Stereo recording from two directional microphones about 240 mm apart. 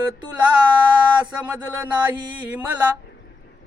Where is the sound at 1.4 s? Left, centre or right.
Centre.